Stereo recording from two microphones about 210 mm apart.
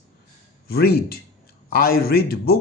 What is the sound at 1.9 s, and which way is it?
Speech, 45° left (ahead or behind).